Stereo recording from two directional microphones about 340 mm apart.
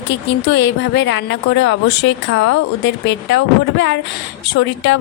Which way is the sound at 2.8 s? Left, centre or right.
Left.